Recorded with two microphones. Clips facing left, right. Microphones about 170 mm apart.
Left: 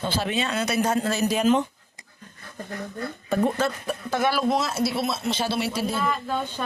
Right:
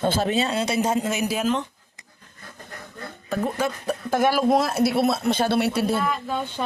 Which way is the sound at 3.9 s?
50° right (ahead or behind).